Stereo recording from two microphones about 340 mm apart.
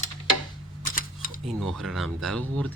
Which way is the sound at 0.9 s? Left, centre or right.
Left.